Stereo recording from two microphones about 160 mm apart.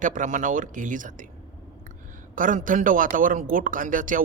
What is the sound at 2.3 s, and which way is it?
A man's voice, 55° right (ahead or behind).